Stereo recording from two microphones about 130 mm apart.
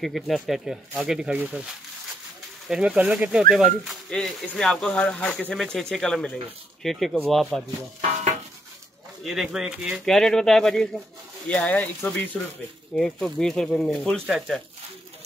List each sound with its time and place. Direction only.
0.0 s speech: centre (ahead or behind)
2.7 s speech: 10° right (ahead or behind)
8.0 s stir: 65° right (ahead or behind)
9.2 s speech: 5° right (ahead or behind)
10.0 s speech: 5° left (ahead or behind)